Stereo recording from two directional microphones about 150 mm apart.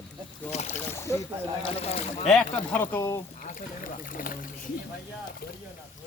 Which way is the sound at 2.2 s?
5° left (ahead or behind).